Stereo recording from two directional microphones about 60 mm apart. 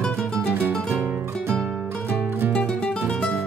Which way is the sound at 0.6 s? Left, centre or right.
Right.